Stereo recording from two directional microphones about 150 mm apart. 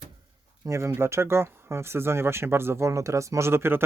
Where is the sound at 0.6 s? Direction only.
20° right (ahead or behind).